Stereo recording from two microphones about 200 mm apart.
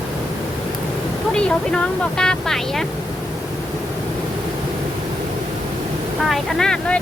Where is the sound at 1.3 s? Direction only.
5° left (ahead or behind).